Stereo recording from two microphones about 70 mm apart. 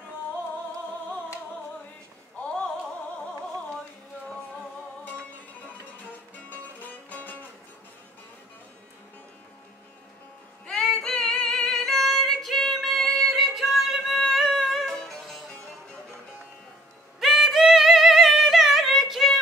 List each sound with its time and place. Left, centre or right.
6.5 s music: left
10.7 s female singing: centre
17.2 s music: centre